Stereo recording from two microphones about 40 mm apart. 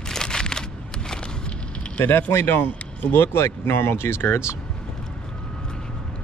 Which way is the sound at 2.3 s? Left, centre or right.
Left.